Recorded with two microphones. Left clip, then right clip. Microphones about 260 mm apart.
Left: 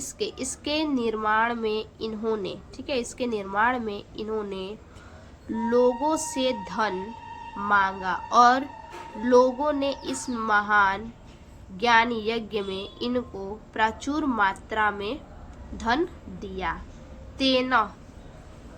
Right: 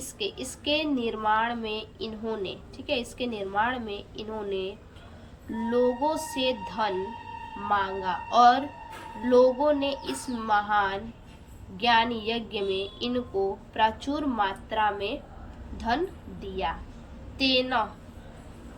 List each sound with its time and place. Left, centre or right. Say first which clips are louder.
0.0 s a woman's voice: left 2 dB; centre
16.4 s a woman's voice: even; centre